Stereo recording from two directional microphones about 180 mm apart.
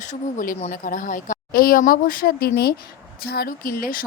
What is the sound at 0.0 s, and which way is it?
Speech, 45° left (ahead or behind).